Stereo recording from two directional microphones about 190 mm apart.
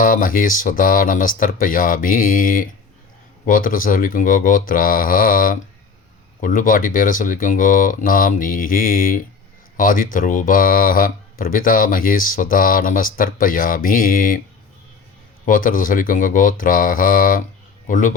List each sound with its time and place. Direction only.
0.0 s speech: 45° left (ahead or behind)
15.4 s a man's voice: 45° left (ahead or behind)